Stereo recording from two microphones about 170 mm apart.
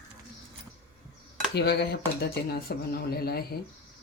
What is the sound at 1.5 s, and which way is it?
Speech, 80° left.